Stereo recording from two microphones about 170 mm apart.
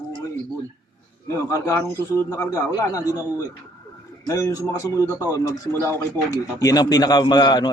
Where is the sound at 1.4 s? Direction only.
15° left (ahead or behind).